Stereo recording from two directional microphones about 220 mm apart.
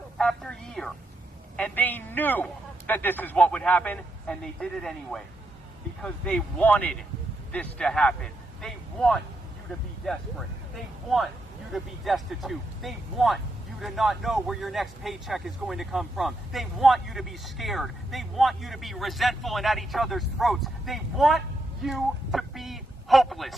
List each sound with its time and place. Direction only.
0.2 s music: centre (ahead or behind)
1.5 s a man's voice: 5° left (ahead or behind)
11.7 s a woman's voice: centre (ahead or behind)